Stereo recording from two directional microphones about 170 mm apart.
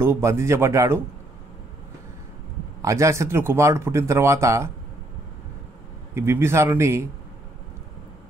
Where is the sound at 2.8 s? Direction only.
20° right (ahead or behind).